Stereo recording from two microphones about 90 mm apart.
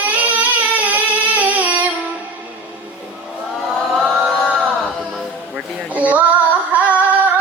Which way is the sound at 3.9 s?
Centre (ahead or behind).